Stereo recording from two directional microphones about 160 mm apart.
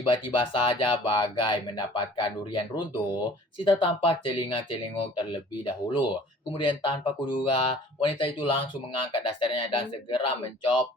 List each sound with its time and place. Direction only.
0.0 s speech: 35° left (ahead or behind)